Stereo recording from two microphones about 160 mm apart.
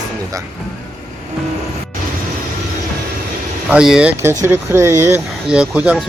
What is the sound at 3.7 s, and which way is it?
Speech, 5° right (ahead or behind).